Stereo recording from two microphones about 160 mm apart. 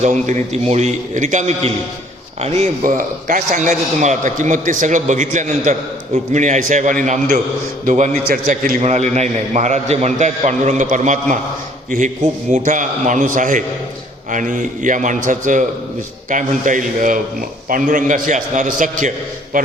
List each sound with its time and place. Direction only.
0.0 s a man's voice: 45° right (ahead or behind)